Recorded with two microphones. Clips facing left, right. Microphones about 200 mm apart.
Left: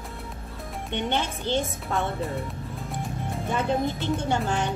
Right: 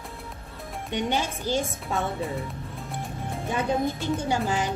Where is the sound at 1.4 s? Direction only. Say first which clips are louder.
Even; 25° left (ahead or behind).